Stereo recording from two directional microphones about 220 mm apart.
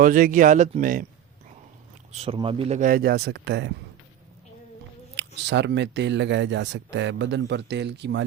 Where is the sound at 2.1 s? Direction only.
25° right (ahead or behind); by 3.7 s 50° right (ahead or behind).